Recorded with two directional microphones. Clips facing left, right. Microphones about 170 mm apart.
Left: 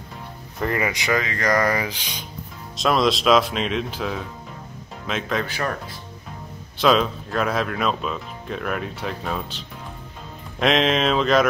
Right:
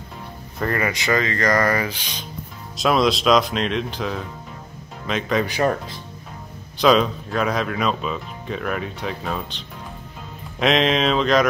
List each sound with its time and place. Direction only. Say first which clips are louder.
0.6 s speech: right 1 dB; 15° left (ahead or behind)
2.8 s speech: right 1 dB; centre (ahead or behind)
5.4 s speech: right 6 dB; 20° right (ahead or behind)
6.8 s speech: right 2 dB; centre (ahead or behind)
10.6 s speech: right 1 dB; centre (ahead or behind)